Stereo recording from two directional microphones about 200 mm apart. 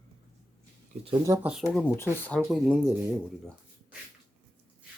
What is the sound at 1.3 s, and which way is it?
Speech, 5° right (ahead or behind).